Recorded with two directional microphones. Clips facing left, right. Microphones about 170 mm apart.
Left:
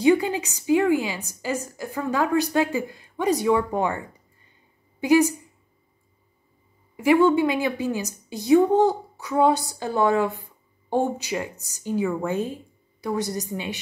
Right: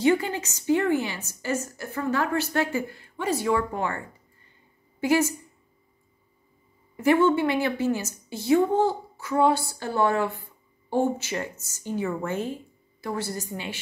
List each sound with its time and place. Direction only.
0.0 s a woman's voice: 15° left (ahead or behind)
7.0 s a woman's voice: 10° left (ahead or behind)